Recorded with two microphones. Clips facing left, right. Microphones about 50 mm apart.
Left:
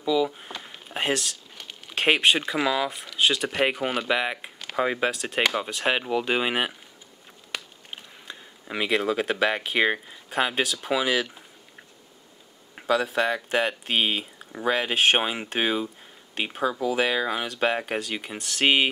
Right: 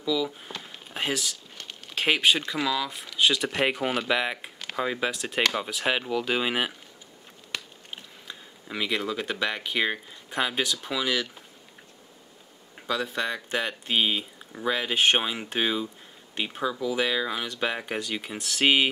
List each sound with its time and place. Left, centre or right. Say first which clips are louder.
0.0 s a sound: left 4 dB; centre
2.9 s speech: even; centre
4.7 s speech: left 3 dB; centre
5.1 s speech: left 1 dB; centre
7.5 s a sound: left 1 dB; centre
9.7 s speech: left 4 dB; centre
10.3 s speech: left 2 dB; centre
12.7 s a sound: left 6 dB; centre
13.0 s speech: left 5 dB; centre